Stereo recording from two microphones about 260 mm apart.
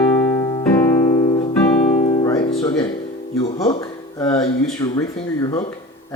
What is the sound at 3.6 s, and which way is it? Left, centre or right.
Speech, centre.